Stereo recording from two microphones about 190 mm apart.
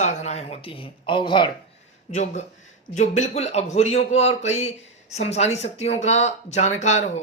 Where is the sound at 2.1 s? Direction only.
40° left (ahead or behind).